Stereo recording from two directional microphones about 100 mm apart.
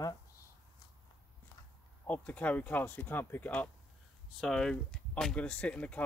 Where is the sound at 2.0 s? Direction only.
15° left (ahead or behind).